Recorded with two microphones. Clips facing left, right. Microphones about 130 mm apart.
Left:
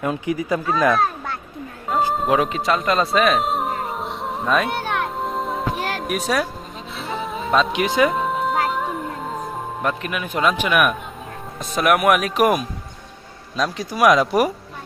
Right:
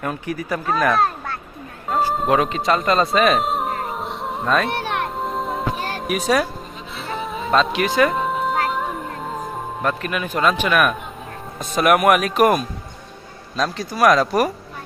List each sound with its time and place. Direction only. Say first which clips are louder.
0.0 s speech: left 3 dB; 20° left (ahead or behind)
2.1 s music: right 1 dB; centre (ahead or behind)
6.1 s speech: right 4 dB; centre (ahead or behind)
6.9 s music: even; centre (ahead or behind)
7.7 s speech: right 1 dB; 20° left (ahead or behind)
8.0 s music: even; centre (ahead or behind)
10.5 s speech: even; 10° left (ahead or behind)
11.6 s speech: right 2 dB; centre (ahead or behind)